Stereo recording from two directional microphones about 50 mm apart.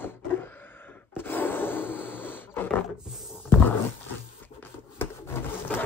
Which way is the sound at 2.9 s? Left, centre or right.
Centre.